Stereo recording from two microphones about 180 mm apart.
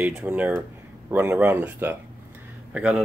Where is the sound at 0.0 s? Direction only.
5° right (ahead or behind).